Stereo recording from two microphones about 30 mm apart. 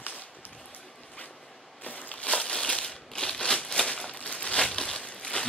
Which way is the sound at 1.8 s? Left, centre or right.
Left.